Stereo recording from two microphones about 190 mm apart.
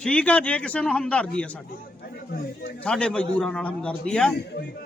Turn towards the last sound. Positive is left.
turn(degrees=5)  # may be behind; listen again after turning